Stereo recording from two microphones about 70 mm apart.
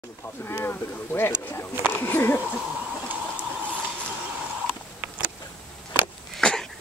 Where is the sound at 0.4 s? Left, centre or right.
Left.